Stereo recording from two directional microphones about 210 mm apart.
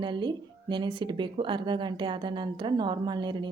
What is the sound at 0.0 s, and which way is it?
Speech, 20° right (ahead or behind).